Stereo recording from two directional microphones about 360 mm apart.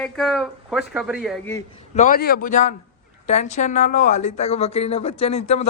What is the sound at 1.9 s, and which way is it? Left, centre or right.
Speech, left.